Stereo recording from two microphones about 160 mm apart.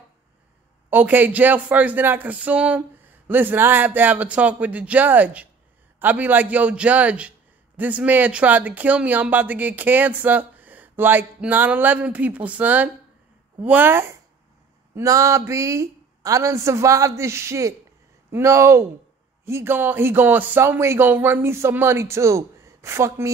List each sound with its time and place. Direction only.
0.8 s a man's voice: 10° right (ahead or behind)